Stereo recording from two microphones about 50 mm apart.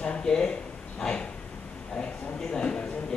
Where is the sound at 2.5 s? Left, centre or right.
Centre.